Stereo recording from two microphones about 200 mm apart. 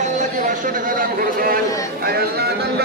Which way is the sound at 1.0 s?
45° right (ahead or behind).